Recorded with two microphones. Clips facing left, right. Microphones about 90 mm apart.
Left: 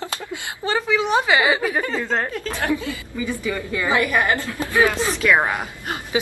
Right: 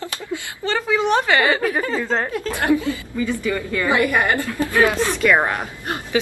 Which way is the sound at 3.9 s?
20° right (ahead or behind).